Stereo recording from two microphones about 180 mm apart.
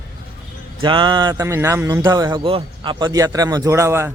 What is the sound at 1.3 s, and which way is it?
Speech, 15° right (ahead or behind).